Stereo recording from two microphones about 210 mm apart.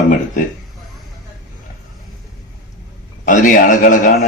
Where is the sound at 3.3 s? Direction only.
40° left (ahead or behind).